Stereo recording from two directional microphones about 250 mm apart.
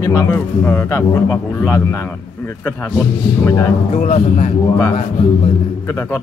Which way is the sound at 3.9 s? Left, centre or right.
Left.